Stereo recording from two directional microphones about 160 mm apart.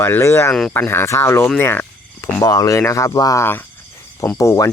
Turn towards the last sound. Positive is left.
turn(degrees=20)  # may be behind; listen again after turning